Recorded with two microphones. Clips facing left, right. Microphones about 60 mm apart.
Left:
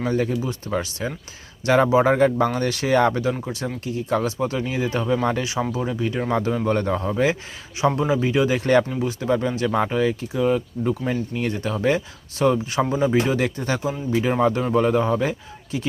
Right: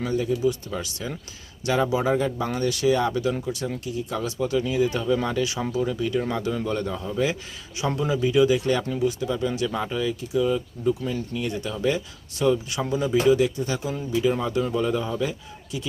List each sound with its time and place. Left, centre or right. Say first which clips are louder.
0.1 s speech: left 2 dB; left
0.4 s speech: right 1 dB; left
3.4 s speech: left 1 dB; left
7.8 s speech: left 4 dB; left
8.9 s speech: left 2 dB; left
11.3 s speech: left 3 dB; left
13.3 s speech: right 1 dB; left